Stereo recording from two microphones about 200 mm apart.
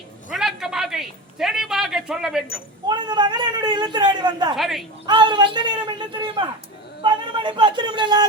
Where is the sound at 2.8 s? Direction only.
20° right (ahead or behind).